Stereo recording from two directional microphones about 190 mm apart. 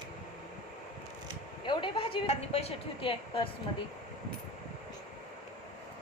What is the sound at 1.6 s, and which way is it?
A woman's voice, 25° left (ahead or behind).